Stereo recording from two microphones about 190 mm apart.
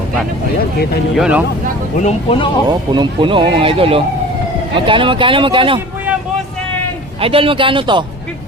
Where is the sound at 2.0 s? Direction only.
30° left (ahead or behind).